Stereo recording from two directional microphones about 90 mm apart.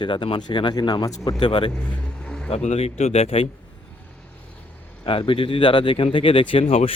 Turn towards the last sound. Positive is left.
turn(degrees=90)